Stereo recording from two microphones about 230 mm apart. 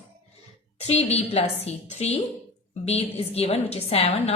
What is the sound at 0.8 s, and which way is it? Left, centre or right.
A woman's voice, left.